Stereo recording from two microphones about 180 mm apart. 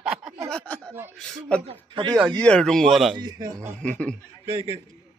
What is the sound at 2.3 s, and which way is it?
Speech, 5° left (ahead or behind).